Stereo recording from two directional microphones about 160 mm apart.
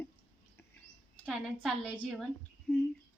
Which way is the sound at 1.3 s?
Centre (ahead or behind).